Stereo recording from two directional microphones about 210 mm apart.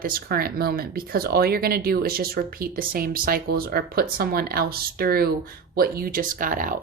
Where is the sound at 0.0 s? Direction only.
45° right (ahead or behind).